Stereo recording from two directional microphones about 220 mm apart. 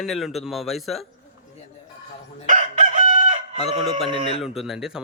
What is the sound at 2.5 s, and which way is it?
Chicken, 35° right (ahead or behind).